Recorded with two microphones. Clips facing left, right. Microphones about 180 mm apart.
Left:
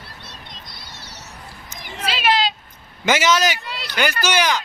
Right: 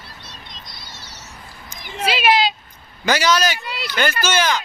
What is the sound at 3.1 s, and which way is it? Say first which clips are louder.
Speech: even; 20° left (ahead or behind).